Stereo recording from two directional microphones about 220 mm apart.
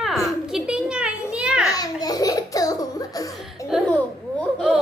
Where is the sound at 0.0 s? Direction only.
Centre (ahead or behind).